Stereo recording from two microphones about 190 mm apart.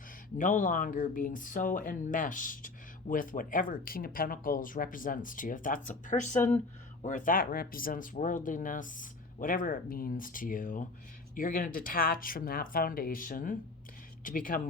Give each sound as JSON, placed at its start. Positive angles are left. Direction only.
{"t": 0.3, "sound": "speech", "side_deg": 45}